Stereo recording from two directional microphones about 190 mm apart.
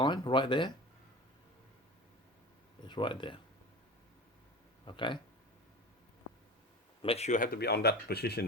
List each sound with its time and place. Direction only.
0.0 s speech: 25° left (ahead or behind)
2.8 s speech: 25° left (ahead or behind)
4.9 s speech: 25° left (ahead or behind)
7.0 s speech: 35° left (ahead or behind); by 8.4 s 55° left (ahead or behind)